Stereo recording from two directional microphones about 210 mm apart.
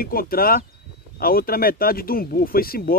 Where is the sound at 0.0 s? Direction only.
45° left (ahead or behind).